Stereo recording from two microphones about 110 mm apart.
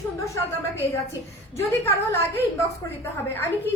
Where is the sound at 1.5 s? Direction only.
25° left (ahead or behind).